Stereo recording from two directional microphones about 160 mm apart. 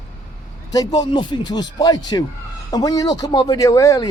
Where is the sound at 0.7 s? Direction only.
25° left (ahead or behind).